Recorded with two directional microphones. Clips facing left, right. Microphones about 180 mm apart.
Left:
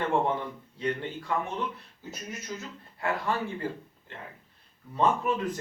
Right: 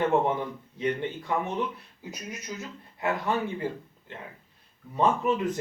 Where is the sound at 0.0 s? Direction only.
20° right (ahead or behind).